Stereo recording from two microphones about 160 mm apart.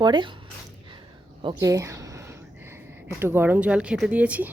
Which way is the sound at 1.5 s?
20° right (ahead or behind).